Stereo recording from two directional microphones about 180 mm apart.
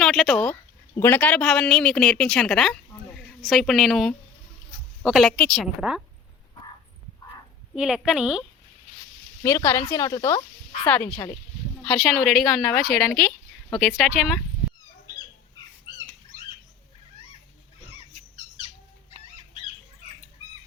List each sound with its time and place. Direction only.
0.0 s a woman's voice: centre (ahead or behind)
7.8 s speech: 5° right (ahead or behind)
9.4 s speech: 15° left (ahead or behind)
10.8 s speech: 5° left (ahead or behind)
11.9 s speech: centre (ahead or behind)